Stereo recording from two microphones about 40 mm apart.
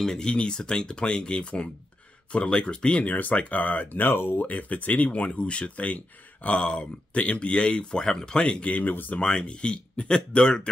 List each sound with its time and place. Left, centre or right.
0.0 s speech: centre
0.3 s speech: left
3.1 s speech: left
4.1 s speech: left
4.5 s speech: left